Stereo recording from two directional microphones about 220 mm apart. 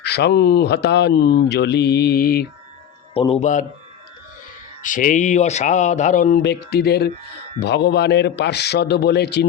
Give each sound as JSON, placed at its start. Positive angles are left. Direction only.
{"t": 0.0, "sound": "speech", "side_deg": 50}
{"t": 3.2, "sound": "speech", "side_deg": 25}
{"t": 4.8, "sound": "speech", "side_deg": 35}
{"t": 6.4, "sound": "speech", "side_deg": 50}